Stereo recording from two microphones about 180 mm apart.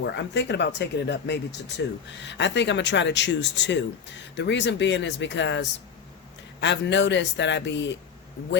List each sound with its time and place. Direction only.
0.0 s a man's voice: 75° left (ahead or behind)